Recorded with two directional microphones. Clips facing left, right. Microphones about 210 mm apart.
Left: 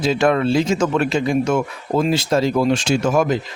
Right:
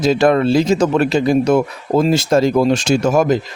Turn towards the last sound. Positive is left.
turn(degrees=-40)  # may be behind; listen again after turning